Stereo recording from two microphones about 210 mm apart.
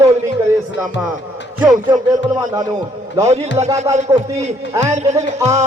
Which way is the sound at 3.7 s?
15° right (ahead or behind).